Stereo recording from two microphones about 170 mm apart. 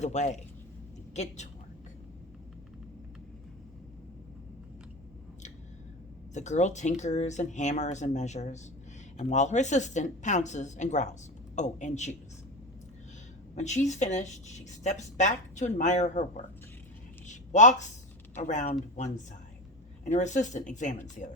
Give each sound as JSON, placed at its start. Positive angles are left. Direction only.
{"t": 0.0, "sound": "speech", "side_deg": 40}
{"t": 6.3, "sound": "speech", "side_deg": 45}
{"t": 13.6, "sound": "speech", "side_deg": 45}
{"t": 17.2, "sound": "a sound", "side_deg": 45}
{"t": 18.4, "sound": "speech", "side_deg": 45}